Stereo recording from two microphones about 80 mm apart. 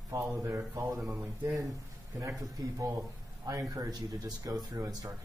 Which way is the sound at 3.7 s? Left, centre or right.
Right.